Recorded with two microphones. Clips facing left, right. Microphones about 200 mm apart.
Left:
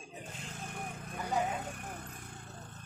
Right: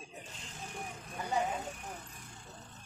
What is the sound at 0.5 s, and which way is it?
Vehicle, 55° left (ahead or behind).